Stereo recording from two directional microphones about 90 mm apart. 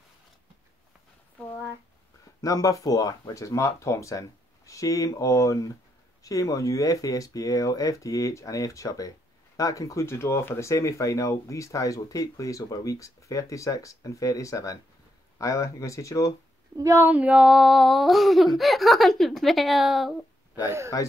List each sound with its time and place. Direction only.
2.4 s speech: 40° left (ahead or behind)
16.7 s speech: 35° right (ahead or behind)
17.0 s a sound: 20° right (ahead or behind); by 20.2 s centre (ahead or behind)
20.6 s speech: 30° right (ahead or behind)